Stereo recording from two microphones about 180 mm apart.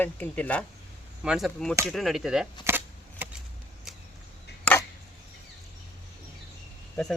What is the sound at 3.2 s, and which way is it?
Vehicle, 10° right (ahead or behind).